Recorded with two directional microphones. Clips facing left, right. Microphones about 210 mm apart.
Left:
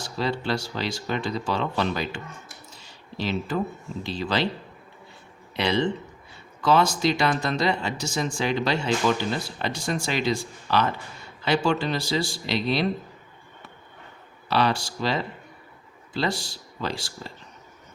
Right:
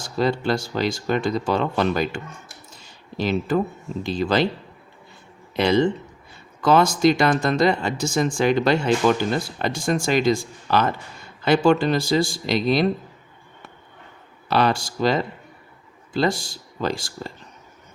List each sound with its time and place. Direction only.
0.0 s speech: 45° right (ahead or behind)
2.8 s a sound: 50° right (ahead or behind)
4.0 s speech: 45° right (ahead or behind)
5.5 s speech: 45° right (ahead or behind)
14.5 s speech: 50° right (ahead or behind)